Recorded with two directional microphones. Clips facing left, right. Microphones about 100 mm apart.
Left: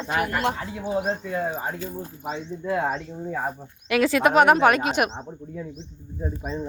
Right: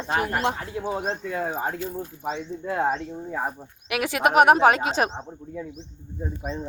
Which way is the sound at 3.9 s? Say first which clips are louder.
Left 3 dB; 15° right (ahead or behind).